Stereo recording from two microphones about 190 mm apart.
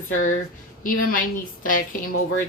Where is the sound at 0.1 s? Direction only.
45° left (ahead or behind).